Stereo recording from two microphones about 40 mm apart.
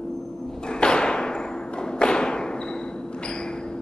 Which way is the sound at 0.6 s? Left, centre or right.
Left.